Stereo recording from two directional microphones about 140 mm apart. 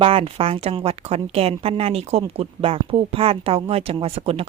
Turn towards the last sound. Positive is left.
turn(degrees=-45)  # may be behind; listen again after turning